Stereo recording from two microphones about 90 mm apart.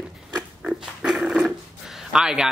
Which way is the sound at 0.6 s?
10° right (ahead or behind).